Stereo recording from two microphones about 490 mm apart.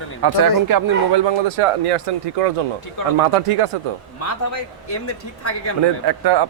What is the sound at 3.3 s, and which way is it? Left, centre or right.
Speech, right.